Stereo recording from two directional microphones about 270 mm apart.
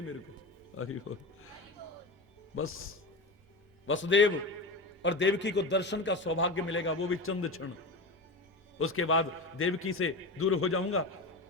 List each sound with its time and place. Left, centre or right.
2.6 s a man's voice: left
8.8 s a man's voice: left